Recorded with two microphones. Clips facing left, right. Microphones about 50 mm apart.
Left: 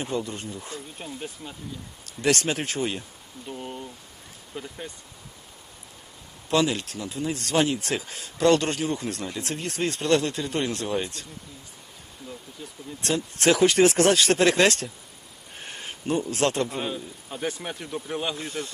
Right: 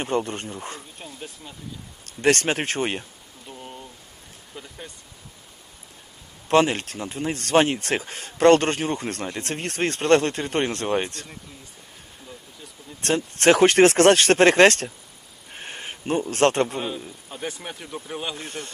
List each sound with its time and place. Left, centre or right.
0.0 s speech: right
0.9 s speech: centre
2.0 s speech: right
3.4 s speech: centre
6.5 s speech: right
13.0 s speech: right
15.5 s a sound: right
16.8 s speech: centre
18.4 s speech: right